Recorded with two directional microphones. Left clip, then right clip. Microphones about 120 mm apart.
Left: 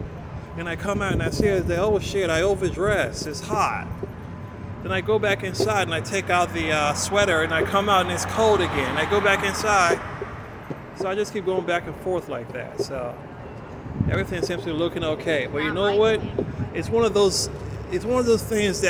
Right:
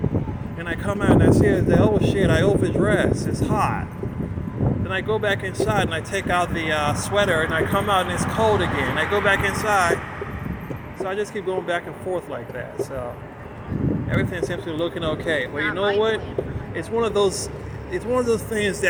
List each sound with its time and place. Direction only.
0.6 s speech: 35° left (ahead or behind)
4.9 s speech: 40° left (ahead or behind)
11.0 s speech: 40° left (ahead or behind)
14.1 s speech: 40° left (ahead or behind)